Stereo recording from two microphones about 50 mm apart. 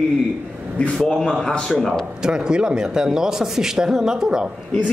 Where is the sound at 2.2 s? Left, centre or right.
Centre.